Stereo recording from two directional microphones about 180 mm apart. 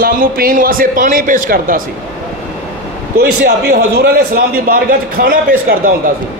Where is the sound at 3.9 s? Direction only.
60° right (ahead or behind).